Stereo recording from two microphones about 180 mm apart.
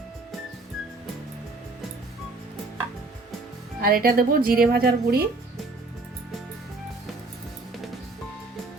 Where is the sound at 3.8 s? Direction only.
55° right (ahead or behind).